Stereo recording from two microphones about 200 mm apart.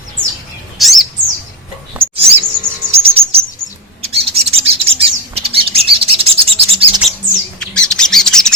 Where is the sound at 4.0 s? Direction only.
30° right (ahead or behind).